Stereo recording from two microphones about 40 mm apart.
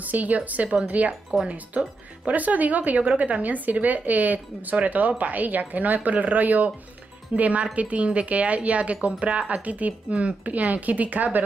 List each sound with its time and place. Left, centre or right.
0.0 s a woman's voice: right